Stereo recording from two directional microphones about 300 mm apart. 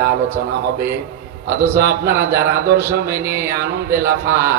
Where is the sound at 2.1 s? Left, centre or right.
Centre.